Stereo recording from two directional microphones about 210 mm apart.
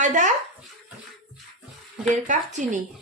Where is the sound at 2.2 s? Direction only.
35° right (ahead or behind).